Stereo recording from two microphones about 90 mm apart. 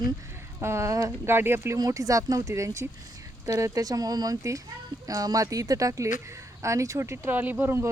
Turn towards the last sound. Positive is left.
turn(degrees=-25)  # may be behind; listen again after turning